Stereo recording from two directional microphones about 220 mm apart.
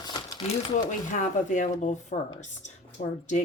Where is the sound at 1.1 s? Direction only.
35° left (ahead or behind).